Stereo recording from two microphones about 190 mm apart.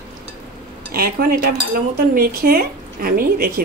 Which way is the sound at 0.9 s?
55° right (ahead or behind).